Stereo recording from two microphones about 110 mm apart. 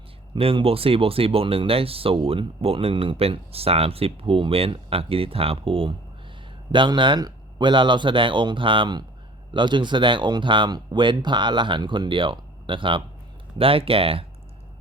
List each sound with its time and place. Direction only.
0.3 s speech: 60° right (ahead or behind)
6.7 s speech: 45° right (ahead or behind)